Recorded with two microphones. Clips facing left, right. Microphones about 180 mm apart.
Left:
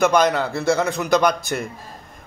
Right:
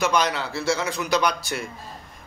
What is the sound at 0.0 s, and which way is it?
A man's voice, 50° left (ahead or behind).